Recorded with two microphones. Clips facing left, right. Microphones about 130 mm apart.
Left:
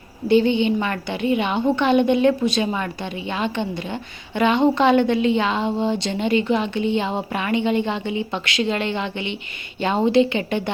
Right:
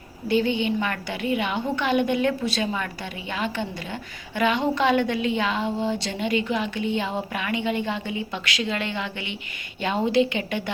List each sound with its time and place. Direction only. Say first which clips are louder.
0.3 s a woman's voice: left 6 dB; 25° left (ahead or behind)